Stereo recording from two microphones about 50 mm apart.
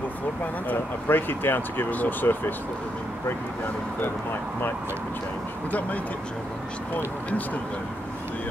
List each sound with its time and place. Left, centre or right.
0.7 s speech: left
5.7 s speech: left